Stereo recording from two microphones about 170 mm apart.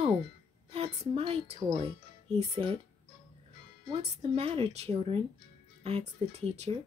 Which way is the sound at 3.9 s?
35° right (ahead or behind).